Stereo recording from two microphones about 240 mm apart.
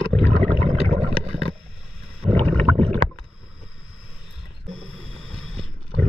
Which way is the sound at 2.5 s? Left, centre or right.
Right.